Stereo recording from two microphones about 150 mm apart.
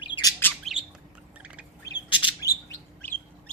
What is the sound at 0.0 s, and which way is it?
Bird, 25° left (ahead or behind).